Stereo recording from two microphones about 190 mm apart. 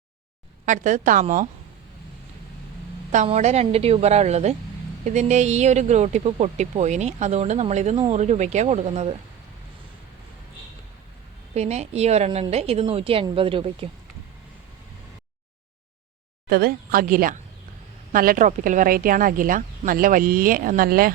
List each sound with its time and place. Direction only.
0.6 s speech: 40° right (ahead or behind)
3.1 s speech: 40° right (ahead or behind)
11.5 s a woman's voice: 35° right (ahead or behind)
16.5 s speech: 55° right (ahead or behind)